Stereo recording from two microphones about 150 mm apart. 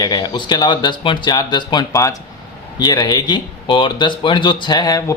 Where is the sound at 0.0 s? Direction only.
25° left (ahead or behind).